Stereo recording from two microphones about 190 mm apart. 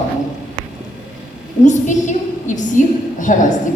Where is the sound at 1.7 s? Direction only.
40° left (ahead or behind).